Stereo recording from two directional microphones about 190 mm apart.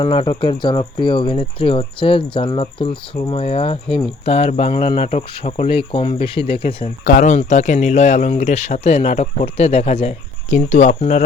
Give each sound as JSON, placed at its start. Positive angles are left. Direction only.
{"t": 0.0, "sound": "speech", "side_deg": 30}
{"t": 7.0, "sound": "speech", "side_deg": 45}